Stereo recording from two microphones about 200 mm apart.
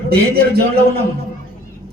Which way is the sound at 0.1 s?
50° right (ahead or behind).